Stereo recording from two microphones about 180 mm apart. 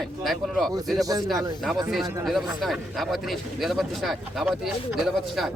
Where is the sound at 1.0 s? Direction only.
20° right (ahead or behind).